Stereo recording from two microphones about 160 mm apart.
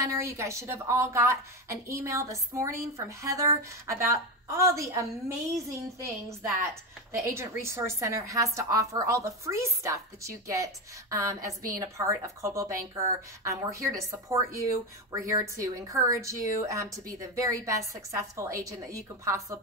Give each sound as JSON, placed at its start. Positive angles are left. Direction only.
{"t": 0.0, "sound": "a woman's voice", "side_deg": -15}